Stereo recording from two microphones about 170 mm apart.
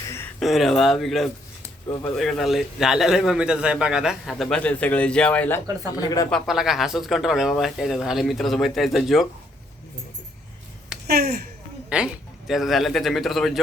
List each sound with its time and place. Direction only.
0.3 s a man's voice: centre (ahead or behind)
6.0 s speech: 20° left (ahead or behind)
6.3 s a man's voice: centre (ahead or behind)
11.0 s speech: 70° right (ahead or behind)
11.9 s a man's voice: 5° right (ahead or behind)